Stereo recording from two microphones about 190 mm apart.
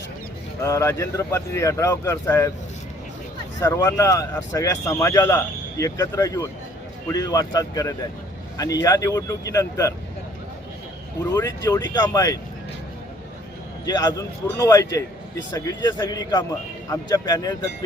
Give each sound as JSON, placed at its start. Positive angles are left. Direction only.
{"t": 0.6, "sound": "speech", "side_deg": 15}
{"t": 3.6, "sound": "speech", "side_deg": 15}
{"t": 11.3, "sound": "speech", "side_deg": 15}
{"t": 13.8, "sound": "speech", "side_deg": 20}